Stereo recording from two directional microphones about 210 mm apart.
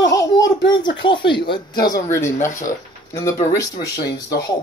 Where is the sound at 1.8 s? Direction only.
15° left (ahead or behind).